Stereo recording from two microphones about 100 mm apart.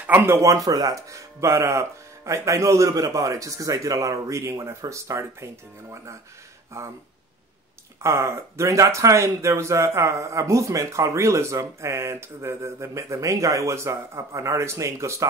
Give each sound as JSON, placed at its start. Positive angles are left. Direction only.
{"t": 0.0, "sound": "speech", "side_deg": -20}
{"t": 8.0, "sound": "speech", "side_deg": -30}